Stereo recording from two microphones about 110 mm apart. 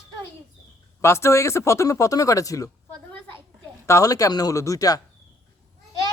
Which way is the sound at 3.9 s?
30° left (ahead or behind).